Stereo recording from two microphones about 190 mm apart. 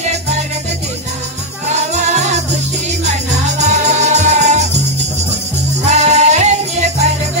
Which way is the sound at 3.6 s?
35° right (ahead or behind).